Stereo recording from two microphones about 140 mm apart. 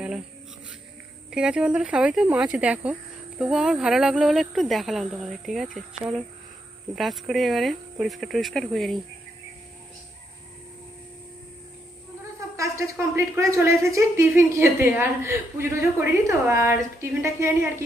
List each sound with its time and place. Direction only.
1.3 s speech: 5° right (ahead or behind)
12.5 s speech: 20° right (ahead or behind)